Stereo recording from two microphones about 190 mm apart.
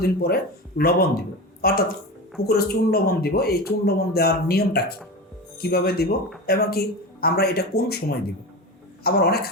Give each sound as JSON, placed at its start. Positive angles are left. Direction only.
{"t": 0.0, "sound": "a man's voice", "side_deg": 55}
{"t": 9.0, "sound": "a man's voice", "side_deg": 55}